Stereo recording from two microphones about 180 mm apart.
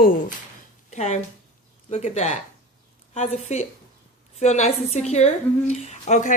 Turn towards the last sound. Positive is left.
turn(degrees=40)  # may be behind; listen again after turning